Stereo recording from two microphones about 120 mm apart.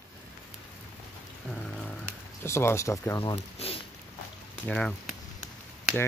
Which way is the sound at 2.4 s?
20° left (ahead or behind).